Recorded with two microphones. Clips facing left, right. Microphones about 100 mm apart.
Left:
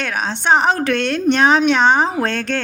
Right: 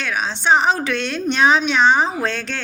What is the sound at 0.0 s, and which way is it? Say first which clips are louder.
A woman's voice: left 1 dB; 50° left (ahead or behind).